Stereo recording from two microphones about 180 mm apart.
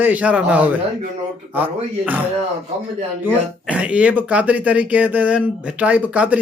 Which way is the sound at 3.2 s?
10° right (ahead or behind).